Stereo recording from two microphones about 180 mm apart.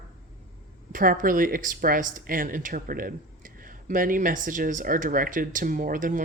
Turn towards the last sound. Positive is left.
turn(degrees=-50)  # may be behind; listen again after turning